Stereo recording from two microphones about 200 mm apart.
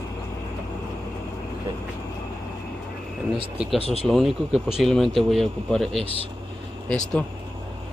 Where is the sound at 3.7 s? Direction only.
30° left (ahead or behind).